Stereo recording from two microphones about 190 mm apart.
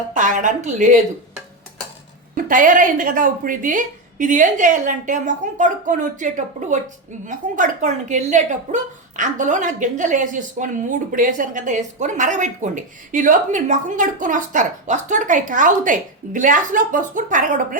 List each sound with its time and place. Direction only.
0.1 s speech: 40° right (ahead or behind)
2.3 s a woman's voice: 45° right (ahead or behind)